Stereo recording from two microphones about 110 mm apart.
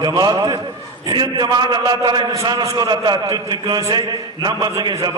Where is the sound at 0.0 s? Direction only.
40° right (ahead or behind).